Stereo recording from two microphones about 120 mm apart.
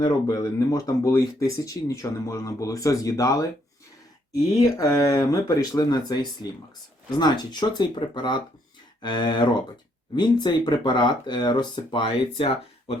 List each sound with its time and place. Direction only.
0.0 s speech: 30° left (ahead or behind)
4.8 s speech: 30° left (ahead or behind); by 12.5 s 50° left (ahead or behind)